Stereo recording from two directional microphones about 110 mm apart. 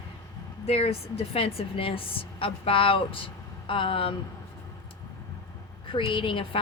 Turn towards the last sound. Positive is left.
turn(degrees=50)  # may be behind; listen again after turning